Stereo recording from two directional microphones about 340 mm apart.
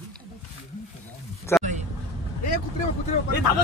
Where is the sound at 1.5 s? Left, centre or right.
Centre.